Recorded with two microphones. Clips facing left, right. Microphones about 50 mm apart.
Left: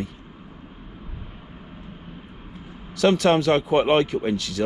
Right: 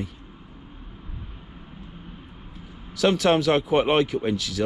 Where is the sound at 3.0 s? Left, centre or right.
Left.